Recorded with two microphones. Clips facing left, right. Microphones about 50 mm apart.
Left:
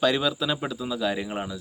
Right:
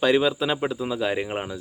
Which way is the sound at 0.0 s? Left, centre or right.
Right.